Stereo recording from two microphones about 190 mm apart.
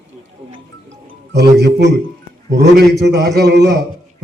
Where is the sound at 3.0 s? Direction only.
65° right (ahead or behind).